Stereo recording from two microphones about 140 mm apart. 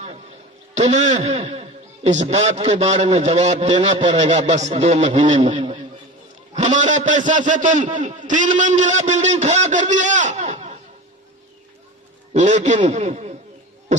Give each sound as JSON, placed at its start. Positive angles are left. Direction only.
{"t": 0.7, "sound": "a man's voice", "side_deg": -55}
{"t": 1.2, "sound": "a man's voice", "side_deg": -45}
{"t": 3.9, "sound": "a man's voice", "side_deg": -35}
{"t": 4.2, "sound": "a man's voice", "side_deg": -55}
{"t": 5.5, "sound": "a man's voice", "side_deg": -40}
{"t": 6.5, "sound": "a man's voice", "side_deg": -60}
{"t": 12.3, "sound": "a man's voice", "side_deg": -60}